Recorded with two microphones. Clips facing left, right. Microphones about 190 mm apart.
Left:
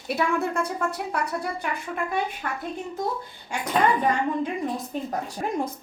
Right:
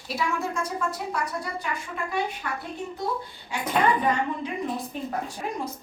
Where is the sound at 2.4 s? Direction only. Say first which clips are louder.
Left 1 dB; 45° left (ahead or behind).